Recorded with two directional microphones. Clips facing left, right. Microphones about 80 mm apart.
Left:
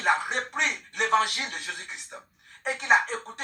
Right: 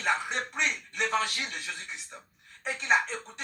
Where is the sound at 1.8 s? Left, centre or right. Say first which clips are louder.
Left 2 dB; left.